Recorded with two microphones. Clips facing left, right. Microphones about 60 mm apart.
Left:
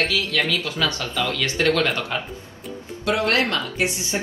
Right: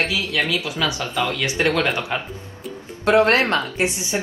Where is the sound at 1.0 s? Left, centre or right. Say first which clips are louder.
Right 2 dB; right.